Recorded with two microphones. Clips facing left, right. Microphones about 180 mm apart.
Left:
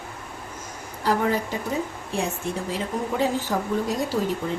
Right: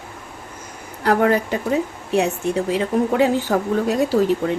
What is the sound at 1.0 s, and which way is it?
Speech, 70° right (ahead or behind).